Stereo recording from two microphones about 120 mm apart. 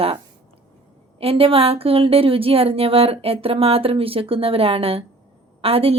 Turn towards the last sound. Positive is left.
turn(degrees=-55)  # may be behind; listen again after turning